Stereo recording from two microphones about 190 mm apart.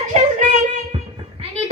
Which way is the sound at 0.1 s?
40° right (ahead or behind).